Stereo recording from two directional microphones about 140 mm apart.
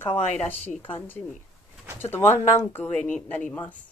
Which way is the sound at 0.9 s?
15° left (ahead or behind).